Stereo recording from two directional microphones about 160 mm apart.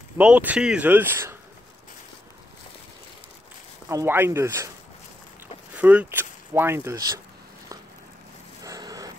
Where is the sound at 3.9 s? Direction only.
15° right (ahead or behind).